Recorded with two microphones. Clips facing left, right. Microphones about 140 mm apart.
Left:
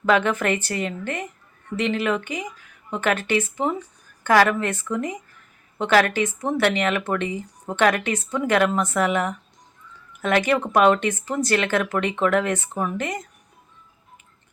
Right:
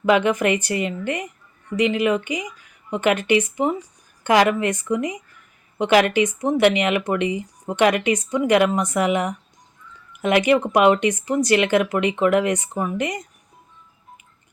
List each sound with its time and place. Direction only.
0.0 s speech: 10° right (ahead or behind)